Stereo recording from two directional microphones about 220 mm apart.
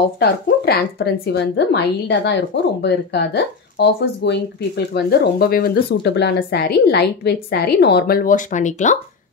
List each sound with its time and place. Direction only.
0.2 s speech: 45° left (ahead or behind)